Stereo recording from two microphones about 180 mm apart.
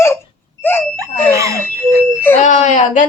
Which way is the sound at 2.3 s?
40° left (ahead or behind).